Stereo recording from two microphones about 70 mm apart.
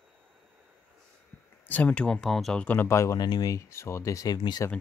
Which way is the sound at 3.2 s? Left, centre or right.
Left.